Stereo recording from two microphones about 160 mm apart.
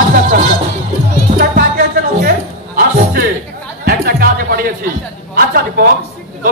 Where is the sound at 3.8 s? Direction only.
65° right (ahead or behind).